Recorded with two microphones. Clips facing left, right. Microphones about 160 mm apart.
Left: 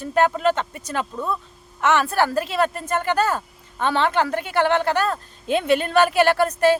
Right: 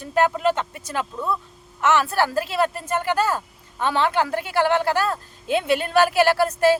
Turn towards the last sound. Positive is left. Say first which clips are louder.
# even
turn(degrees=-5)  # may be behind; listen again after turning